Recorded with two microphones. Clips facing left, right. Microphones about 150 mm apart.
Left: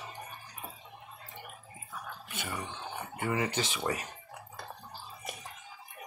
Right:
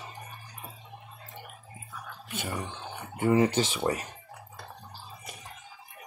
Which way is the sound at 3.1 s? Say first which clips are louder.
Right 9 dB; 35° right (ahead or behind).